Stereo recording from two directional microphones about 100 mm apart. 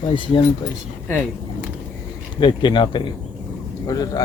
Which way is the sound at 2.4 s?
50° left (ahead or behind).